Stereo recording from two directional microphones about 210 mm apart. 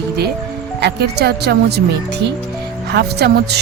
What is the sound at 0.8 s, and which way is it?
Speech, 50° right (ahead or behind).